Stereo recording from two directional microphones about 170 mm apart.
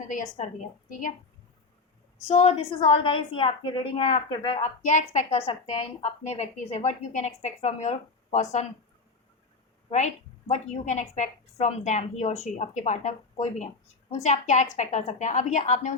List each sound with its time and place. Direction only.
0.3 s a woman's voice: 45° left (ahead or behind)
2.2 s a woman's voice: 40° left (ahead or behind)
4.8 s a woman's voice: 45° left (ahead or behind)
10.5 s a woman's voice: 45° left (ahead or behind)